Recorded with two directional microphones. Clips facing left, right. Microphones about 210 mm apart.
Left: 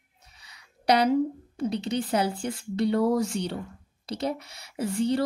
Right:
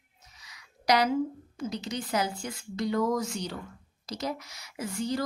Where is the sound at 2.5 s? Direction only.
30° left (ahead or behind).